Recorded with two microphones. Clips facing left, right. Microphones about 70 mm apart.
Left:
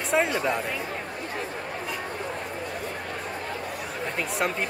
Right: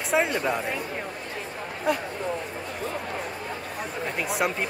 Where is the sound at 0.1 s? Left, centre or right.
Centre.